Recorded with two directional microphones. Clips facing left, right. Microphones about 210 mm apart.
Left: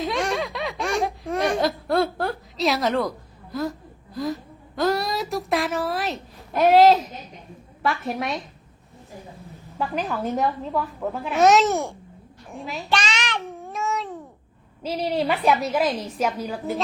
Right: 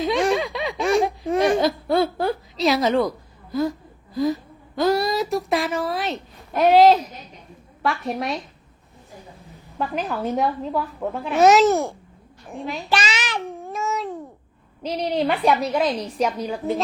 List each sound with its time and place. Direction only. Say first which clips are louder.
0.0 s a sound: right 5 dB; centre (ahead or behind)
7.8 s a woman's voice: right 1 dB; centre (ahead or behind)
9.4 s a woman's voice: right 1 dB; centre (ahead or behind)
12.5 s child singing: right 2 dB; centre (ahead or behind)
14.8 s a woman's voice: right 1 dB; 5° left (ahead or behind)